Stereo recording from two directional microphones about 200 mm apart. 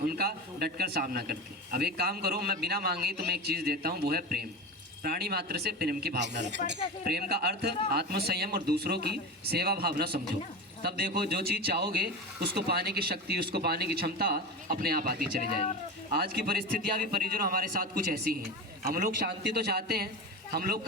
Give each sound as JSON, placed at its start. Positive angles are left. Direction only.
{"t": 0.0, "sound": "a man's voice", "side_deg": -50}